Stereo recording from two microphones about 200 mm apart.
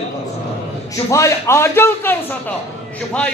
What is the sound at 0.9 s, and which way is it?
A man's voice, 15° left (ahead or behind).